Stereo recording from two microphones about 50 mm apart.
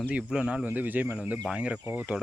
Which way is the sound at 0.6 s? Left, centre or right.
Right.